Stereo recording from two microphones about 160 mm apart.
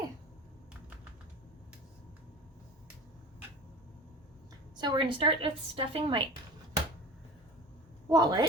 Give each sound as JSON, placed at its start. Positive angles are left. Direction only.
{"t": 4.8, "sound": "a woman's voice", "side_deg": -30}
{"t": 8.1, "sound": "speech", "side_deg": -25}